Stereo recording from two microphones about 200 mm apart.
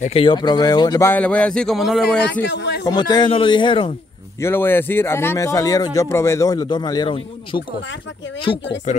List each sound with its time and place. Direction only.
0.0 s speech: 30° left (ahead or behind); by 2.1 s centre (ahead or behind)
2.4 s speech: 60° left (ahead or behind)
2.8 s speech: 20° left (ahead or behind)
4.4 s speech: 10° left (ahead or behind)
8.9 s speech: 35° left (ahead or behind)